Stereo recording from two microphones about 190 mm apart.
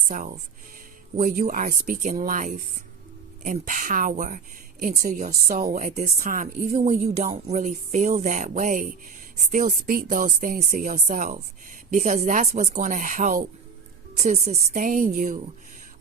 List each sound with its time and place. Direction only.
0.1 s a woman's voice: 45° right (ahead or behind)